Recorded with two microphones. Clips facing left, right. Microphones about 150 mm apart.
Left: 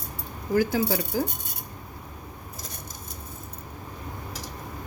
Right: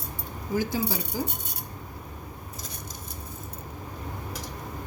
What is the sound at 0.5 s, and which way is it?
Speech, 60° left (ahead or behind).